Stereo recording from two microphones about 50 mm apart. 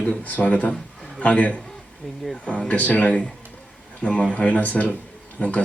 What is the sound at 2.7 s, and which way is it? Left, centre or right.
A man's voice, left.